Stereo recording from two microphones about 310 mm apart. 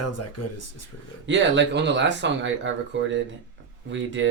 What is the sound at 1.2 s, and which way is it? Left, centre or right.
Speech, right.